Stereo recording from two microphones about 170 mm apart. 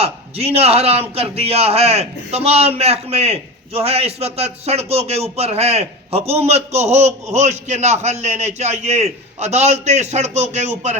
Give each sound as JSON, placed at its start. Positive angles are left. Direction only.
{"t": 0.0, "sound": "a man's voice", "side_deg": -35}